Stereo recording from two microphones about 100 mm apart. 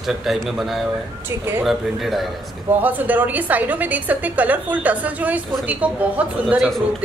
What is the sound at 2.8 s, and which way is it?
A woman's voice, 15° right (ahead or behind).